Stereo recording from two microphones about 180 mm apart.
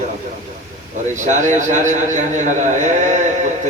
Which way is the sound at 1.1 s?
45° right (ahead or behind).